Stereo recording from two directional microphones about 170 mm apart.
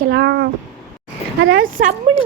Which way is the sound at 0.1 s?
75° right (ahead or behind).